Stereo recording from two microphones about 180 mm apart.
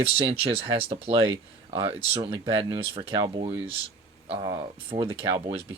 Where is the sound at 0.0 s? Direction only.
30° right (ahead or behind).